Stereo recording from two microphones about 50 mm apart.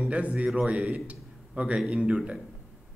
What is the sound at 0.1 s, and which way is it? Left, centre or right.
A man's voice, right.